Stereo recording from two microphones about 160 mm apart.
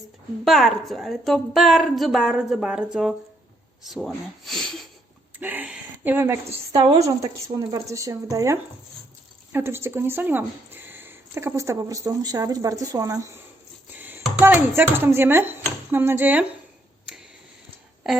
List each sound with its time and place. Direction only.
0.4 s a woman's voice: centre (ahead or behind)
5.4 s a woman's voice: 10° right (ahead or behind)
6.8 s speech: 30° right (ahead or behind)
13.9 s dishes: 10° right (ahead or behind)